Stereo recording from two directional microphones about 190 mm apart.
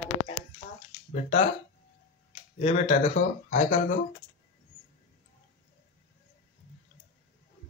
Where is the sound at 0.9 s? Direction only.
35° left (ahead or behind).